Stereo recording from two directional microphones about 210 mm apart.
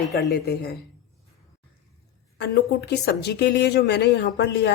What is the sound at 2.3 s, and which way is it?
Speech, 50° left (ahead or behind).